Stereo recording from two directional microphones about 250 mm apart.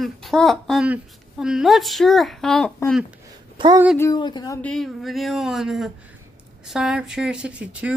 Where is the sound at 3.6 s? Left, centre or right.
Centre.